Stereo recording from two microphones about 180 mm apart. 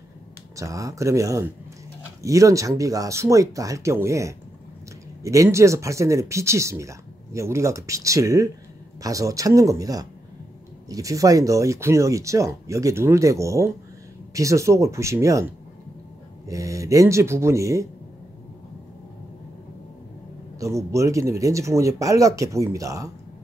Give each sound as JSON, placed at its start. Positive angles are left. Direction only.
{"t": 0.6, "sound": "speech", "side_deg": -15}
{"t": 20.5, "sound": "speech", "side_deg": -15}